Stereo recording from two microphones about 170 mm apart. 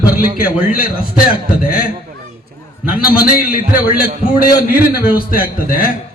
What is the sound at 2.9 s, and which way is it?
A man's voice, 55° left (ahead or behind).